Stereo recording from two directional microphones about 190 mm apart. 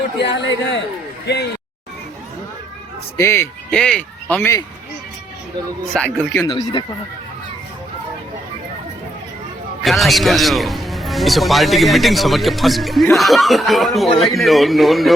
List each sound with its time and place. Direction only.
0.2 s speech: 65° left (ahead or behind)
3.2 s speech: 15° left (ahead or behind)
5.9 s speech: 5° left (ahead or behind)
6.4 s speech: 20° left (ahead or behind)
9.8 s a man's voice: centre (ahead or behind)